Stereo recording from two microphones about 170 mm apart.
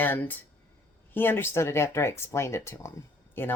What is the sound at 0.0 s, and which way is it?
Speech, 10° left (ahead or behind).